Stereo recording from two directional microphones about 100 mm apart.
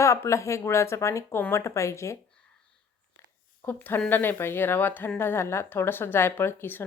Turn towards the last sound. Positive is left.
turn(degrees=20)  # may be behind; listen again after turning